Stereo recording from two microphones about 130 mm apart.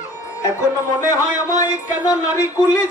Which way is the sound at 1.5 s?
25° left (ahead or behind).